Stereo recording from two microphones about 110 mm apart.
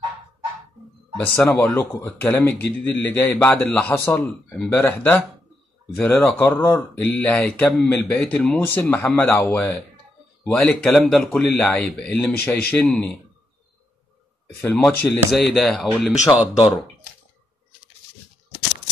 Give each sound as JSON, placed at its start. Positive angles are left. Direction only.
{"t": 1.5, "sound": "a man's voice", "side_deg": 20}
{"t": 10.5, "sound": "a man's voice", "side_deg": 5}
{"t": 14.6, "sound": "a man's voice", "side_deg": 15}
{"t": 15.3, "sound": "speech", "side_deg": 0}